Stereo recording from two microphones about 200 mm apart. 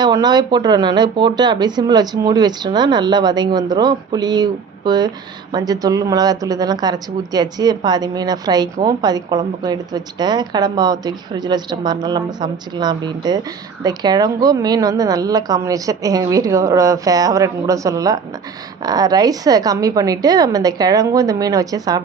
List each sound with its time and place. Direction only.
0.0 s a woman's voice: 20° right (ahead or behind)